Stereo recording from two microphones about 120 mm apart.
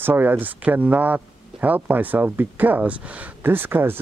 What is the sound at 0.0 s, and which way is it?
Speech, 15° right (ahead or behind).